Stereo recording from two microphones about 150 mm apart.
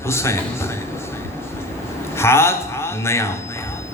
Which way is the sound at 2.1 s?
15° left (ahead or behind).